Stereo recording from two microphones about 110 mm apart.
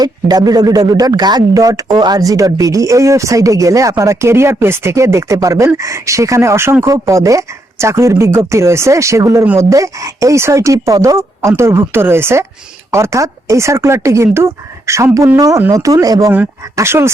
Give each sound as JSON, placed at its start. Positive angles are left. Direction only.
{"t": 0.0, "sound": "speech", "side_deg": -35}